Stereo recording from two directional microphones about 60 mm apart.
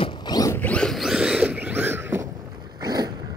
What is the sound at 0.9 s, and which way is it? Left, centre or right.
Zipper, centre.